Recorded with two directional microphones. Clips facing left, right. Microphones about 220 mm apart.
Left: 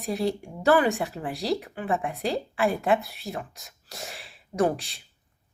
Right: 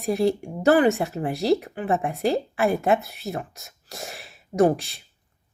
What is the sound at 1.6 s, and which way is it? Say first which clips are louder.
Speech: right 3 dB; 40° right (ahead or behind).